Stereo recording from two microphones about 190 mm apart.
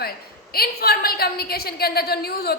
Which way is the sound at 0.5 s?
55° left (ahead or behind).